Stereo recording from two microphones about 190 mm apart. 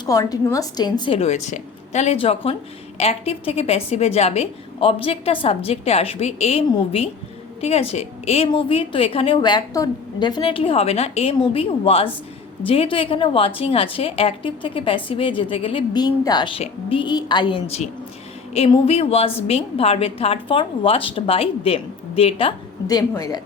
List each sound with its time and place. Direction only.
0.0 s a woman's voice: 20° left (ahead or behind)